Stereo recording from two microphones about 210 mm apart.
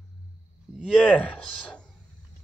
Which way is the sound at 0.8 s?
5° left (ahead or behind).